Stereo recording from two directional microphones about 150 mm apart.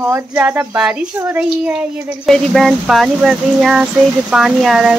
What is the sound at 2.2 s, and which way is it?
Child singing, centre (ahead or behind).